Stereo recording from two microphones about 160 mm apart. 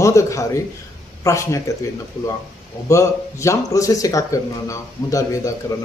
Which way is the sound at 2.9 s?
20° left (ahead or behind).